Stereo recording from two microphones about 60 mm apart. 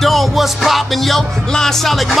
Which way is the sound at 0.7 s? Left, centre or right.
Centre.